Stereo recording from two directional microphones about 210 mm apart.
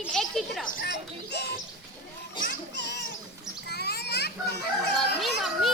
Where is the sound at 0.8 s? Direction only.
50° left (ahead or behind).